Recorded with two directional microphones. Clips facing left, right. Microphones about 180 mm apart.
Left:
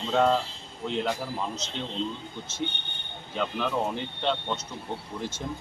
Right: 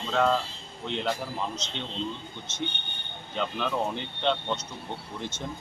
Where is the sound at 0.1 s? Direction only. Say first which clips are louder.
Left 2 dB; 20° left (ahead or behind).